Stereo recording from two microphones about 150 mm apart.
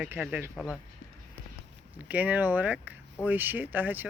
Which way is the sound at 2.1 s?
10° right (ahead or behind).